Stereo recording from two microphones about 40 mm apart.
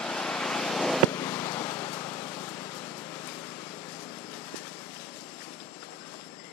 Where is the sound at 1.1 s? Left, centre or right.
Left.